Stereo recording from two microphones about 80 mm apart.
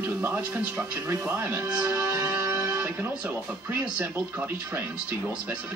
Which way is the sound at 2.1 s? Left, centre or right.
Right.